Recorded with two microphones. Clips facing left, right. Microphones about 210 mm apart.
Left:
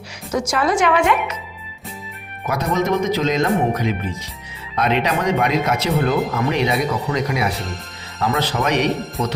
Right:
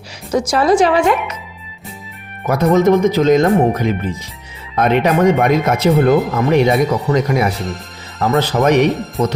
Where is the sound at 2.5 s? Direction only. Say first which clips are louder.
Right 8 dB; 50° right (ahead or behind).